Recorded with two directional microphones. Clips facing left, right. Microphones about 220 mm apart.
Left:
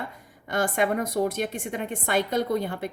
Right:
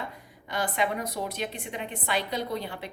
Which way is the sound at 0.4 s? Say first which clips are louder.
Left 4 dB; 50° left (ahead or behind).